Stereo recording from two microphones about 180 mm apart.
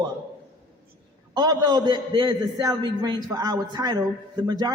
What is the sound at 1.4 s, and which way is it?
A man's voice, 20° right (ahead or behind).